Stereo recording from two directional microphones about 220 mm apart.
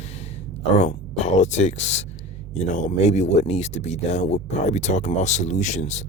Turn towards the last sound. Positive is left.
turn(degrees=30)  # may be behind; listen again after turning